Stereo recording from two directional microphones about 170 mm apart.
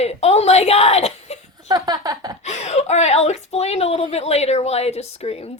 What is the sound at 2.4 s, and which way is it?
A woman's voice, 40° left (ahead or behind).